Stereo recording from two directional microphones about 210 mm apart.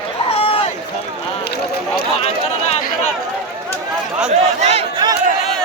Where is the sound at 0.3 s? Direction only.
30° left (ahead or behind).